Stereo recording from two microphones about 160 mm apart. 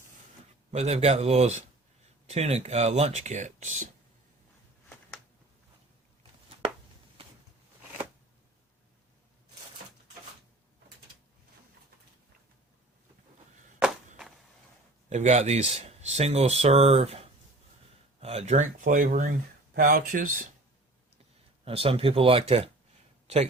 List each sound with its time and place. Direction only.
0.7 s speech: 40° right (ahead or behind)
13.7 s walk: 5° right (ahead or behind)
15.1 s speech: 45° right (ahead or behind)
21.6 s speech: 35° right (ahead or behind)